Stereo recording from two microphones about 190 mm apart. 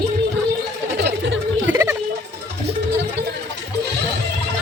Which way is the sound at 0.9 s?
65° right (ahead or behind).